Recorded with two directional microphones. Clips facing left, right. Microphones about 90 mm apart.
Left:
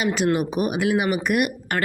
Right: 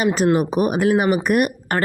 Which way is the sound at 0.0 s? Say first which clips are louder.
Right 4 dB; 40° right (ahead or behind).